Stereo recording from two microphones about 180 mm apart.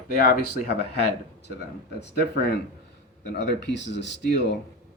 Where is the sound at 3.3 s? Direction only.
75° left (ahead or behind).